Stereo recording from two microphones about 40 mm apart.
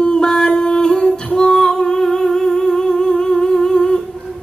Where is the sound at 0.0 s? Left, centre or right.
Centre.